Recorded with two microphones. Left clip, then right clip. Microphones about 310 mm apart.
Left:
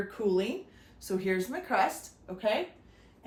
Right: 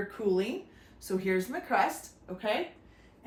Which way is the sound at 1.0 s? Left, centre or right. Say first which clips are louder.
Even; centre.